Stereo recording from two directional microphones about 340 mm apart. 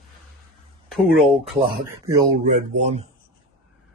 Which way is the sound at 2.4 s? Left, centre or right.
Right.